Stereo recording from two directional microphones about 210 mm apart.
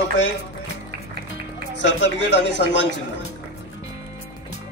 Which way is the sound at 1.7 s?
55° left (ahead or behind).